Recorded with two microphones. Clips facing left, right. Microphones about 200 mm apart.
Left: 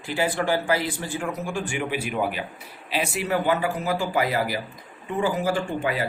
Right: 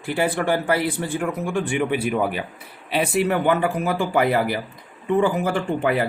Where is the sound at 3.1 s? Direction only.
60° right (ahead or behind).